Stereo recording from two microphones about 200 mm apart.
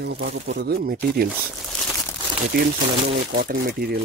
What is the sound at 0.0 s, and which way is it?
Speech, 55° right (ahead or behind).